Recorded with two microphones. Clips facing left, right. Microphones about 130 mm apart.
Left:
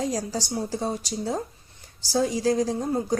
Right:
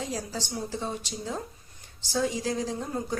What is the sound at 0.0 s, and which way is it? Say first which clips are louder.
A woman's voice: left 6 dB; 40° left (ahead or behind).